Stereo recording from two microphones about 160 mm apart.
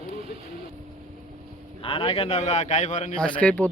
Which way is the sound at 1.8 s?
35° left (ahead or behind).